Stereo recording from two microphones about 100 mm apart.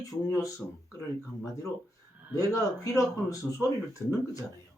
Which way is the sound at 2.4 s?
35° left (ahead or behind).